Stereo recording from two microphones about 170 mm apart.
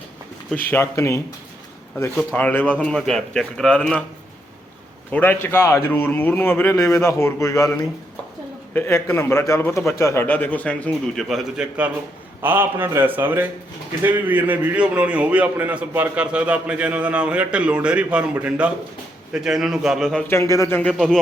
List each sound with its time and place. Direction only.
0.7 s speech: 15° left (ahead or behind)
2.3 s speech: 10° left (ahead or behind)
5.1 s speech: 10° left (ahead or behind)
8.7 s a man's voice: 15° left (ahead or behind)
20.2 s speech: 15° left (ahead or behind)